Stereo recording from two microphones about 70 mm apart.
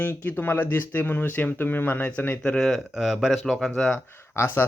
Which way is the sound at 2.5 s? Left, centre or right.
Centre.